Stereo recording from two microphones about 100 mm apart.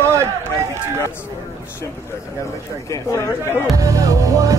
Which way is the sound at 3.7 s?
35° right (ahead or behind).